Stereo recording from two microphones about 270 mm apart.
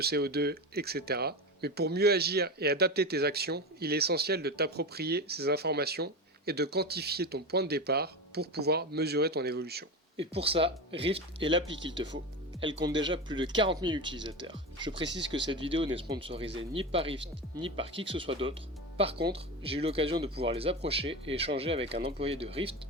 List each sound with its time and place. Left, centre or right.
0.0 s speech: right
10.2 s speech: right